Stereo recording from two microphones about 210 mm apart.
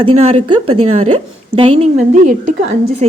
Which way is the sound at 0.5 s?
90° right.